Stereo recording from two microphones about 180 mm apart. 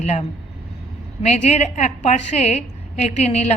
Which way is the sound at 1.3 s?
40° left (ahead or behind).